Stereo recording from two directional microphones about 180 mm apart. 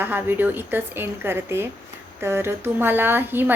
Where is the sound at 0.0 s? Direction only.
10° right (ahead or behind).